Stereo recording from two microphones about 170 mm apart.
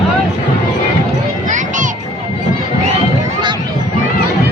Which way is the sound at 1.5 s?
45° right (ahead or behind).